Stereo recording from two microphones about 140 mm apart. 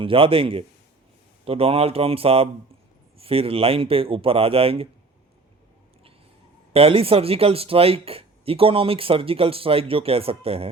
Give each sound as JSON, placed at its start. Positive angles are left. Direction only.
{"t": 0.0, "sound": "a man's voice", "side_deg": -40}
{"t": 6.7, "sound": "speech", "side_deg": -45}